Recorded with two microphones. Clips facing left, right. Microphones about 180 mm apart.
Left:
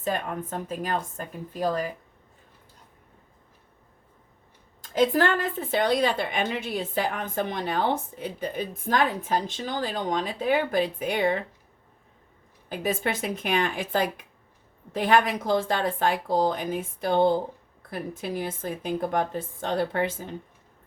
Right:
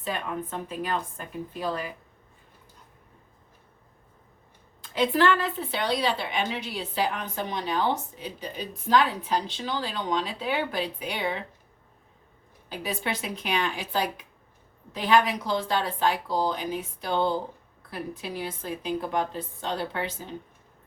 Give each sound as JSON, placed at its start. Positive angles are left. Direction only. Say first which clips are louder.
{"t": 0.0, "sound": "a woman's voice", "louder": "left 3 dB", "side_deg": 45}
{"t": 4.8, "sound": "a woman's voice", "louder": "left 2 dB", "side_deg": 45}
{"t": 12.6, "sound": "a woman's voice", "louder": "left 4 dB", "side_deg": 50}